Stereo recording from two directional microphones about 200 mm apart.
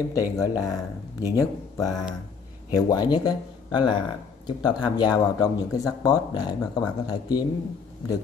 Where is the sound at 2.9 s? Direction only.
20° left (ahead or behind).